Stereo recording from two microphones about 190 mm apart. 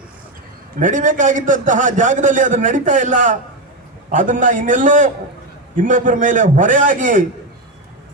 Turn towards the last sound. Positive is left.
turn(degrees=-45)  # may be behind; listen again after turning